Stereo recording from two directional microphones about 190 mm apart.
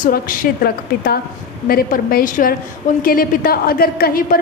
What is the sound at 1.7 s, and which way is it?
A woman's voice, 50° left (ahead or behind).